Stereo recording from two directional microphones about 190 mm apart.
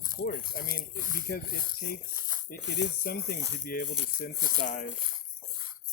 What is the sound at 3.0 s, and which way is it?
Speech, 55° left (ahead or behind).